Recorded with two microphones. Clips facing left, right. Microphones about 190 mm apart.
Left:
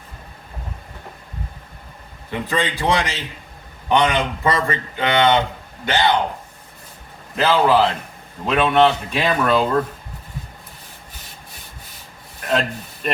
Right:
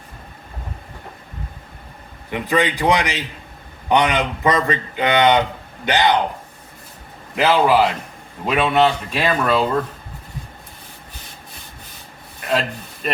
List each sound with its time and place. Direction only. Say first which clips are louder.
2.3 s a man's voice: right 3 dB; 15° right (ahead or behind)
7.3 s a man's voice: right 1 dB; 15° right (ahead or behind)
12.5 s a sound: even; centre (ahead or behind)